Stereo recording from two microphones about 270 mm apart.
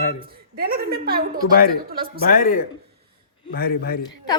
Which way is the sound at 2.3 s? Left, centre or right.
Left.